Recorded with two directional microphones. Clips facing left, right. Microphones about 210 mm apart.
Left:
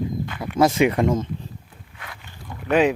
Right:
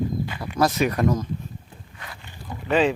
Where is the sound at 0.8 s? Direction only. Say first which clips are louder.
Left 3 dB; 25° left (ahead or behind).